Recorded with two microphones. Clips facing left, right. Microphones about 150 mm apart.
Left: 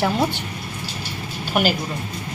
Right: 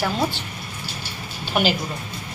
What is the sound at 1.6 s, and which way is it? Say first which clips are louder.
Speech: left 1 dB; 5° left (ahead or behind).